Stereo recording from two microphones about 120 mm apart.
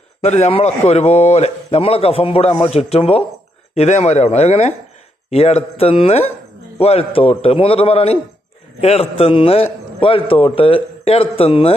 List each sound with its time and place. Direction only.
0.2 s a man's voice: 65° left (ahead or behind)
3.8 s a man's voice: 65° left (ahead or behind)